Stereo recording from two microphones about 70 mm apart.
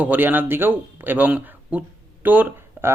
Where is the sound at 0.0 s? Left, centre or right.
Right.